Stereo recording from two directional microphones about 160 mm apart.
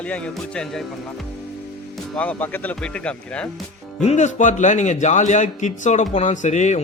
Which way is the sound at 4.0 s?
45° left (ahead or behind).